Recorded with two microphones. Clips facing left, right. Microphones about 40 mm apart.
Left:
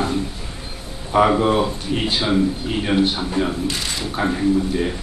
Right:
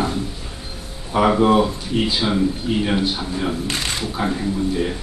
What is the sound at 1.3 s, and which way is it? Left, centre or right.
A man's voice, centre.